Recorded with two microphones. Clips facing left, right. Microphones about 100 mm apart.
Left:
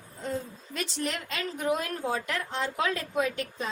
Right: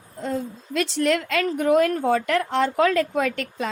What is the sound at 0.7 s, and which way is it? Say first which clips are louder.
Speech: right 11 dB; 75° right (ahead or behind).